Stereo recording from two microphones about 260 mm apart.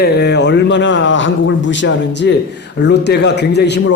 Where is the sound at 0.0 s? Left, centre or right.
Left.